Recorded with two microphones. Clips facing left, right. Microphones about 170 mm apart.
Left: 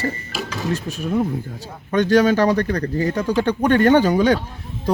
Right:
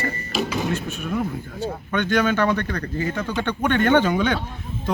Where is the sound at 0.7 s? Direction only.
35° left (ahead or behind).